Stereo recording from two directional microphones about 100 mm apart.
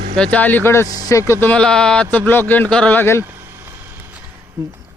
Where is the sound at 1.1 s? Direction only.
30° left (ahead or behind).